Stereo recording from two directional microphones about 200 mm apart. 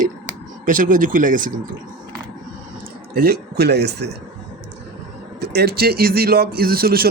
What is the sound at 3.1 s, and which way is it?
Speech, 50° right (ahead or behind).